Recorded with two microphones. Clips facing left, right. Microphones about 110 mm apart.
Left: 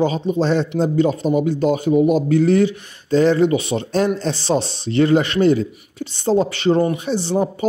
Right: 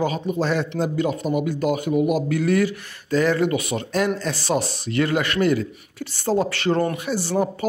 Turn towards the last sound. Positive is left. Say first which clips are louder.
# left 3 dB
turn(degrees=20)  # may be behind; listen again after turning